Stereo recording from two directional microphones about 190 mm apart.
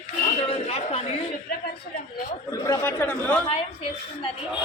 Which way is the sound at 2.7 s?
10° left (ahead or behind).